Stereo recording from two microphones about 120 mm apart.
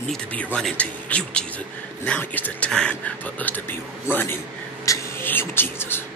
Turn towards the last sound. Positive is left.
turn(degrees=20)  # may be behind; listen again after turning